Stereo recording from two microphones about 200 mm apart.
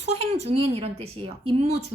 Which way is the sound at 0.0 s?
30° right (ahead or behind).